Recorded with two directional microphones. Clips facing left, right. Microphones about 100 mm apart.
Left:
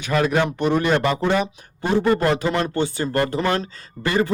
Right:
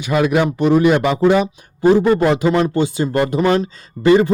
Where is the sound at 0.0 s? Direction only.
10° right (ahead or behind).